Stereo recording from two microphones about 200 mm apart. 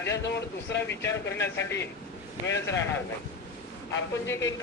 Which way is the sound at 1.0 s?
15° left (ahead or behind).